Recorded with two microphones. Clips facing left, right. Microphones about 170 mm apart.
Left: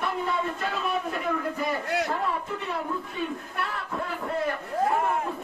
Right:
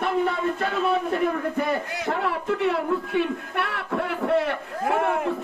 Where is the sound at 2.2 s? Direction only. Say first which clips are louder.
Right 5 dB; 75° right (ahead or behind).